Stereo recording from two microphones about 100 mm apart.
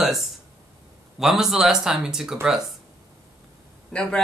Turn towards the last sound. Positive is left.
turn(degrees=10)  # may be behind; listen again after turning